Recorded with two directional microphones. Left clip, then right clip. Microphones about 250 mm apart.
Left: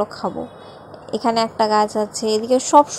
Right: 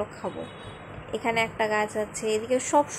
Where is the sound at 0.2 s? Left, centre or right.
Left.